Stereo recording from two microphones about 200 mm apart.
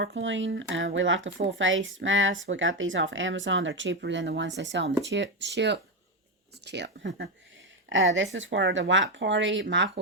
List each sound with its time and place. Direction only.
0.0 s speech: 65° right (ahead or behind)
7.9 s speech: 70° right (ahead or behind)